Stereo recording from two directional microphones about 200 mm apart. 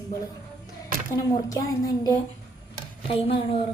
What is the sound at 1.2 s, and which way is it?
A child's voice, 15° left (ahead or behind).